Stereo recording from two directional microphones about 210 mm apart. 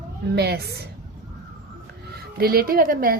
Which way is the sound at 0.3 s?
50° right (ahead or behind).